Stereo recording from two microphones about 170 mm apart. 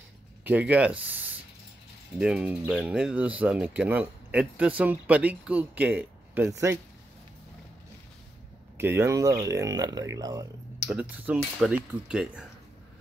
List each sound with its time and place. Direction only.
0.4 s speech: 10° right (ahead or behind)
8.7 s speech: 15° right (ahead or behind)
10.9 s speech: 5° right (ahead or behind)